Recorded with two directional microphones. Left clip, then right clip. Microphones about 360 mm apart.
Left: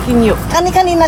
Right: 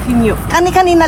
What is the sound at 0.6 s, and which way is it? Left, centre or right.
Speech, centre.